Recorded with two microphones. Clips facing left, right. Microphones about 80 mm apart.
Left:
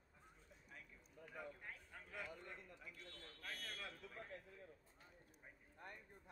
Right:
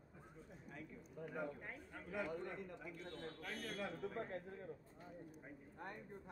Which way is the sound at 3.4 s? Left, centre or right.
Centre.